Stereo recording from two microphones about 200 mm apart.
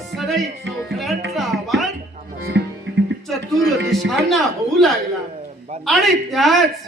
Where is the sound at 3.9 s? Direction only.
Centre (ahead or behind).